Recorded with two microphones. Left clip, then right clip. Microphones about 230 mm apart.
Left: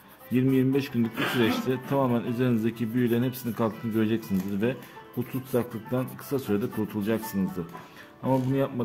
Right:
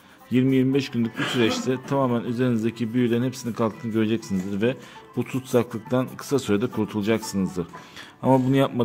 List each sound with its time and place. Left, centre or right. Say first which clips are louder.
0.3 s speech: right 3 dB; centre
5.2 s speech: right 6 dB; right